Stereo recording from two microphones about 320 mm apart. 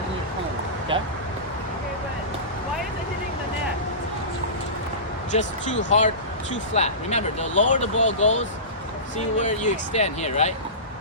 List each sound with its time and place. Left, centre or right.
5.3 s speech: left